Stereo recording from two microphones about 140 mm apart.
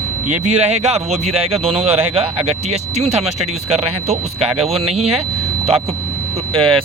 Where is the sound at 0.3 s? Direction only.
50° right (ahead or behind).